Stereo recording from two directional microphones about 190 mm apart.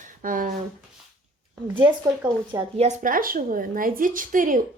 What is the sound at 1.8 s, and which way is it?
Speech, 15° right (ahead or behind).